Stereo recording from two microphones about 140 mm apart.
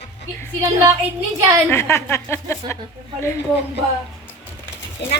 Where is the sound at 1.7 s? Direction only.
20° left (ahead or behind).